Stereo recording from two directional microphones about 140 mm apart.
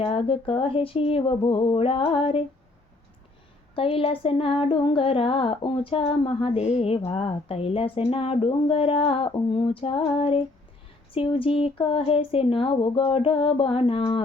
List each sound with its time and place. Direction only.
0.0 s female singing: 40° left (ahead or behind)
3.8 s female singing: 40° left (ahead or behind)